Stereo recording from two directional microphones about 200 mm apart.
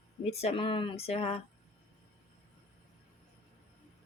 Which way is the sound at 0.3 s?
30° left (ahead or behind).